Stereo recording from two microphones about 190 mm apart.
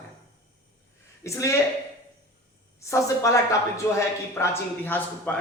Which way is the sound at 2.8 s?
15° left (ahead or behind).